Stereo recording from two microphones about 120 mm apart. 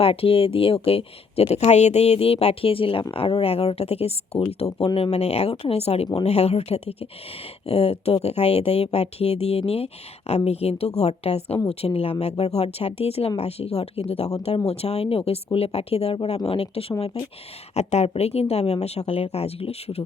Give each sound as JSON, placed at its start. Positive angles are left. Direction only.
{"t": 0.0, "sound": "speech", "side_deg": 50}